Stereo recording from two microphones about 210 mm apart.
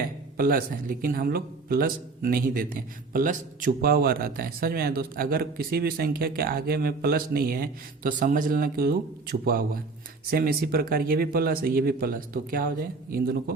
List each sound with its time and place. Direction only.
0.3 s a man's voice: 45° right (ahead or behind)